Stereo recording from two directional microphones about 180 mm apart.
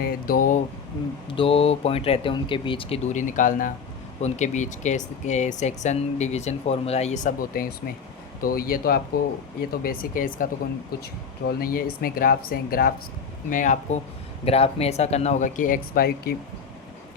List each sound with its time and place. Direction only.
0.0 s speech: 50° left (ahead or behind)
1.3 s speech: 30° left (ahead or behind)
14.4 s speech: 35° left (ahead or behind); by 16.3 s 55° left (ahead or behind)